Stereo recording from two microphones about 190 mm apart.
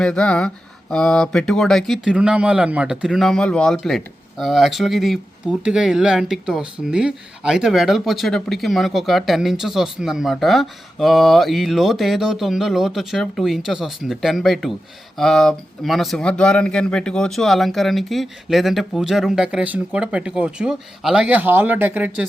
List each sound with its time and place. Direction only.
0.0 s speech: 5° left (ahead or behind)